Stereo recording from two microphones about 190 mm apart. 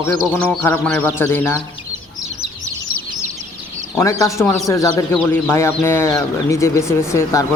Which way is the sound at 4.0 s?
15° left (ahead or behind).